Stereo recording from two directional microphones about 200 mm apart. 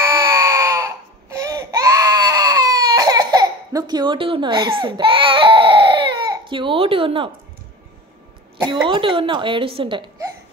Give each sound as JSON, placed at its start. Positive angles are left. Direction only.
{"t": 0.0, "sound": "baby cry", "side_deg": -15}
{"t": 8.6, "sound": "speech", "side_deg": -25}